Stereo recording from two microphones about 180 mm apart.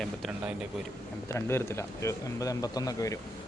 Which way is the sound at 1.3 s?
15° left (ahead or behind).